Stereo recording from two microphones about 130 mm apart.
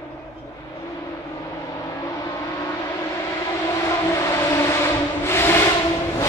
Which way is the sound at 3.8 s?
20° left (ahead or behind).